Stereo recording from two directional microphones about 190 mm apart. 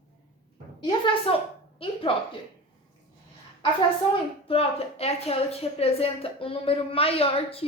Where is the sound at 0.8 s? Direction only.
25° left (ahead or behind).